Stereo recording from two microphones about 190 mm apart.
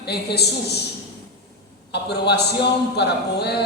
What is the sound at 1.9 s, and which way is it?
A man's voice, 60° left (ahead or behind).